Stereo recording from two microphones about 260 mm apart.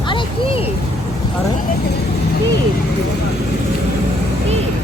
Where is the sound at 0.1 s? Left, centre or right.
Centre.